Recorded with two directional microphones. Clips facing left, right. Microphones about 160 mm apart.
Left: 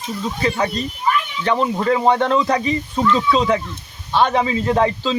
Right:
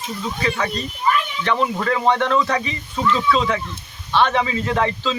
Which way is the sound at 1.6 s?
20° left (ahead or behind).